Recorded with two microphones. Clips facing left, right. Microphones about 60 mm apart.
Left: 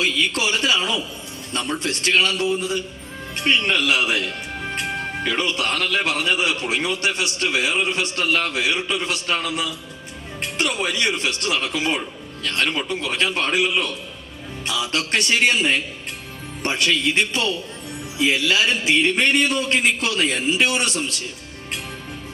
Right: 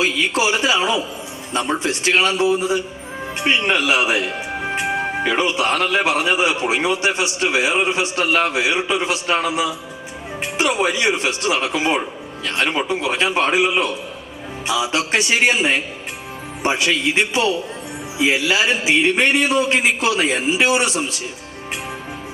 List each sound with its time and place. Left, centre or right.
0.0 s speech: centre